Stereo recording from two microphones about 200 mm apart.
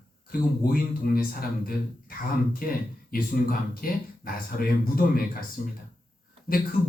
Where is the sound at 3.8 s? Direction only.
45° left (ahead or behind).